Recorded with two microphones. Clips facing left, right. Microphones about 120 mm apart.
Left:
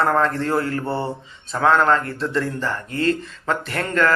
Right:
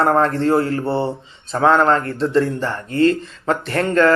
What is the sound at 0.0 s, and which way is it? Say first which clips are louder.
Speech: right 4 dB; 35° right (ahead or behind).